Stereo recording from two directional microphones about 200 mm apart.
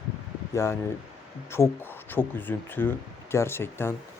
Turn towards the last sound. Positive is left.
turn(degrees=10)  # may be behind; listen again after turning